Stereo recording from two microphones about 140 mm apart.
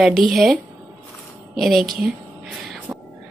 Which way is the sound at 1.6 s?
Centre (ahead or behind).